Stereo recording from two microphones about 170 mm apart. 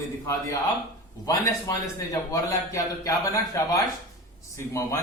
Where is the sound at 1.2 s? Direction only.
20° left (ahead or behind).